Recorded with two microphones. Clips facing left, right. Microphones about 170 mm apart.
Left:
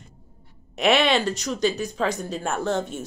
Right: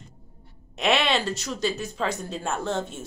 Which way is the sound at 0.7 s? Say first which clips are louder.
Left 4 dB; centre (ahead or behind).